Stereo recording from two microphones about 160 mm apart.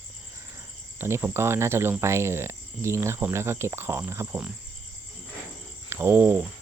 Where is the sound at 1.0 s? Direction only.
15° right (ahead or behind).